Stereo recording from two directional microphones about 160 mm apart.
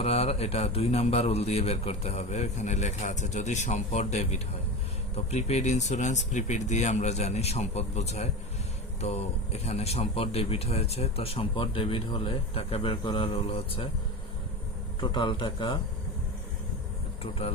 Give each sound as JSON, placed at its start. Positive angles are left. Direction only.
{"t": 0.0, "sound": "a man's voice", "side_deg": 40}
{"t": 15.0, "sound": "a man's voice", "side_deg": 30}